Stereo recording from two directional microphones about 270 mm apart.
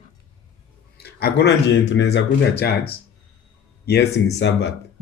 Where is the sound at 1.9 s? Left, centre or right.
Left.